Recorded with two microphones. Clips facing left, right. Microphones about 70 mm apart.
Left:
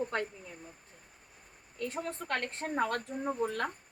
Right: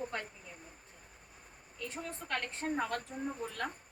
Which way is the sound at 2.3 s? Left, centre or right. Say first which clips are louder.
Left 1 dB; left.